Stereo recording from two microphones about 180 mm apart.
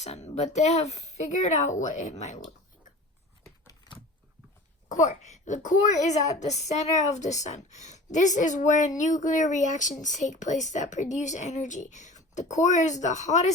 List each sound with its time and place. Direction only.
0.0 s speech: 40° left (ahead or behind)
4.9 s a woman's voice: 40° left (ahead or behind)